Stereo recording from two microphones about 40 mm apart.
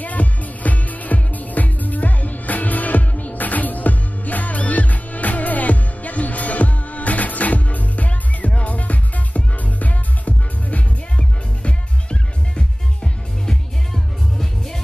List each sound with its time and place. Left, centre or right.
0.0 s music: left
13.9 s music: centre